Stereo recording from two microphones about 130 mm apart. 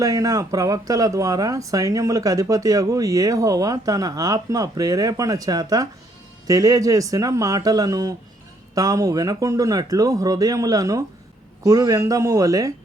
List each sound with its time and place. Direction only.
0.0 s speech: 25° right (ahead or behind)